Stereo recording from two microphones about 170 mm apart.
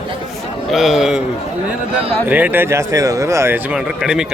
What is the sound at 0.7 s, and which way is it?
Speech, centre (ahead or behind).